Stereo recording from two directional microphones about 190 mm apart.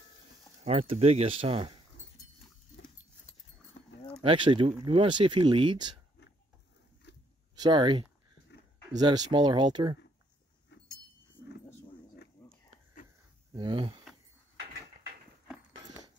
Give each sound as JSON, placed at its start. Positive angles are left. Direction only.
{"t": 0.7, "sound": "speech", "side_deg": -35}
{"t": 4.2, "sound": "speech", "side_deg": -25}
{"t": 7.0, "sound": "a sound", "side_deg": 65}
{"t": 7.5, "sound": "speech", "side_deg": -25}
{"t": 8.5, "sound": "a sound", "side_deg": 65}
{"t": 8.9, "sound": "speech", "side_deg": -20}
{"t": 10.7, "sound": "a sound", "side_deg": 65}
{"t": 13.5, "sound": "speech", "side_deg": -25}
{"t": 15.7, "sound": "dog", "side_deg": -20}